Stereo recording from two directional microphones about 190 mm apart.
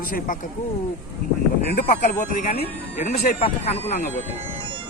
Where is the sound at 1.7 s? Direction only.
45° left (ahead or behind).